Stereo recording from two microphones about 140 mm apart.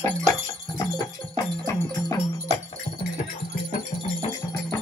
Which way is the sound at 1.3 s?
25° left (ahead or behind).